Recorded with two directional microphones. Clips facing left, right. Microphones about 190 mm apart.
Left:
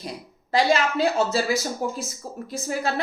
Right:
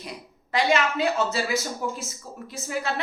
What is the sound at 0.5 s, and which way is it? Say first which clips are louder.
A woman's voice: left 2 dB; 35° left (ahead or behind).